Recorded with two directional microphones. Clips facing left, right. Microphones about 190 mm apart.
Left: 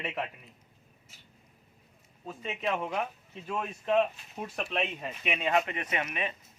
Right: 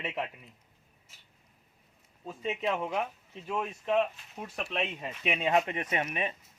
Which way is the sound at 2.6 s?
5° right (ahead or behind).